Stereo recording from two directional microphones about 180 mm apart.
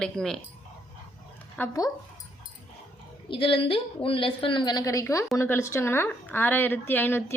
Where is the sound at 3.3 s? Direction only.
30° left (ahead or behind).